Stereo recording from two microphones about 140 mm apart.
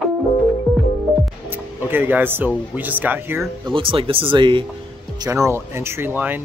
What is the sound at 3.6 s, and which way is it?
Speech, 40° right (ahead or behind).